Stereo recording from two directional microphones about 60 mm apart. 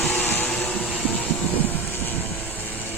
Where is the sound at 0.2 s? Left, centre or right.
Left.